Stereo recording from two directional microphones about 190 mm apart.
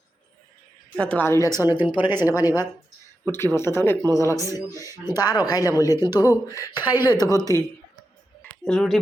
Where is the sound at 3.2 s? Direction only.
10° left (ahead or behind).